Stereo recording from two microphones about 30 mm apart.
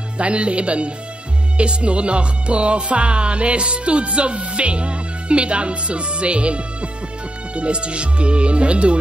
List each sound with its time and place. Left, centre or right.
0.2 s speech: right